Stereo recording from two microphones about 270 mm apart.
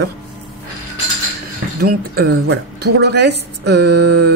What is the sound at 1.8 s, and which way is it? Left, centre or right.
A woman's voice, right.